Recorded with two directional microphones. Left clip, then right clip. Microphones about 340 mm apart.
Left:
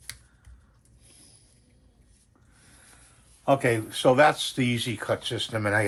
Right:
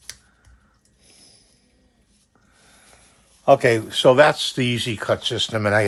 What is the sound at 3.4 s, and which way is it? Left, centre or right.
Speech, right.